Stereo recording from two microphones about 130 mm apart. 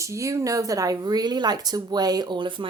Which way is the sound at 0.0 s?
25° right (ahead or behind).